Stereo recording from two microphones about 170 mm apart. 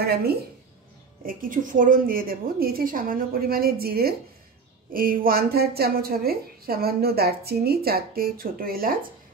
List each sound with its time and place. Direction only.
0.0 s a woman's voice: 65° right (ahead or behind)
1.2 s a woman's voice: 55° right (ahead or behind)